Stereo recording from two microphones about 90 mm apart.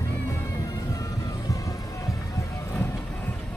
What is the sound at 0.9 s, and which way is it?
Music, 40° left (ahead or behind).